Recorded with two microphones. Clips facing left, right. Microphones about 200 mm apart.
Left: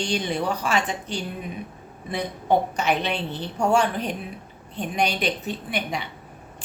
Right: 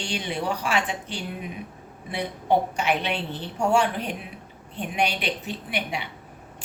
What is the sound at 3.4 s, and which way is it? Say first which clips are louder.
A woman's voice: left 1 dB; 40° left (ahead or behind).